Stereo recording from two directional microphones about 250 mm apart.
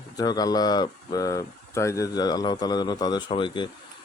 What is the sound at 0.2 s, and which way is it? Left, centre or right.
Speech, centre.